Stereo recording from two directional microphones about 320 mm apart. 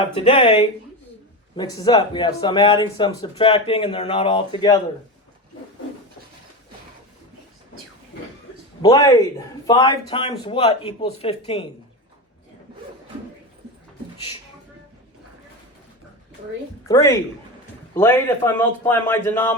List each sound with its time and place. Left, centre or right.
0.0 s speech: centre
8.8 s speech: centre
16.9 s speech: centre